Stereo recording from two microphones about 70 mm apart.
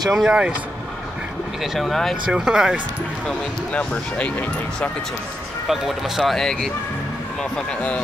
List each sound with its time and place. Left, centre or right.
0.1 s speech: centre
1.6 s speech: centre
2.3 s speech: centre
3.3 s speech: centre
5.7 s speech: centre
7.5 s speech: centre